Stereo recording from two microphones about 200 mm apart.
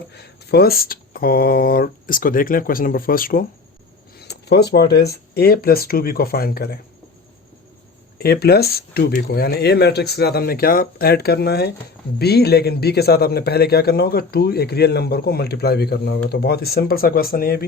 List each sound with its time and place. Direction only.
0.1 s a man's voice: 55° left (ahead or behind)
4.2 s a man's voice: 55° left (ahead or behind)
8.2 s a man's voice: 50° left (ahead or behind)